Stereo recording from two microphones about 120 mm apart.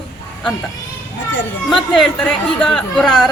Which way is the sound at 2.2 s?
5° left (ahead or behind).